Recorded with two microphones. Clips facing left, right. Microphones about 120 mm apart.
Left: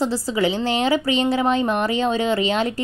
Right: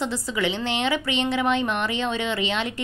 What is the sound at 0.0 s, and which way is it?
A woman's voice, 35° left (ahead or behind).